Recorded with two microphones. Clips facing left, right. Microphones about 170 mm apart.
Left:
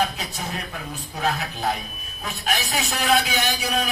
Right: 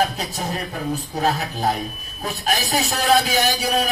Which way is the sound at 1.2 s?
35° right (ahead or behind).